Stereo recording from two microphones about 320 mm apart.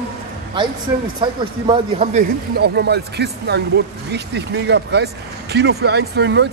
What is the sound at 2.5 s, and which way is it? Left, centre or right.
Speech, right.